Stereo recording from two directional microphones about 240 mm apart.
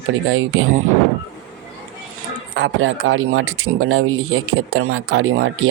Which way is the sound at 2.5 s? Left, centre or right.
Right.